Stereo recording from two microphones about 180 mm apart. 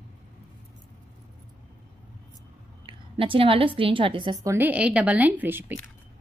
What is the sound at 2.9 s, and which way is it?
A woman's voice, 30° right (ahead or behind).